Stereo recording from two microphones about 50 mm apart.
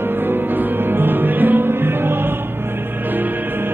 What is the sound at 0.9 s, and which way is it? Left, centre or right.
Music, right.